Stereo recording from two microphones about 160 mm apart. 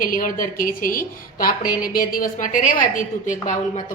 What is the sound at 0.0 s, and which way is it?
A woman's voice, 60° left (ahead or behind).